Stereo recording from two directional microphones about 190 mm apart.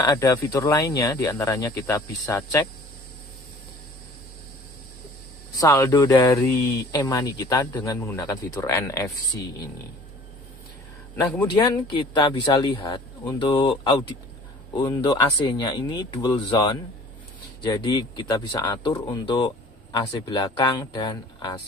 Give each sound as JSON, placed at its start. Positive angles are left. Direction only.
{"t": 0.0, "sound": "speech", "side_deg": 20}
{"t": 5.5, "sound": "speech", "side_deg": 15}
{"t": 11.5, "sound": "speech", "side_deg": 25}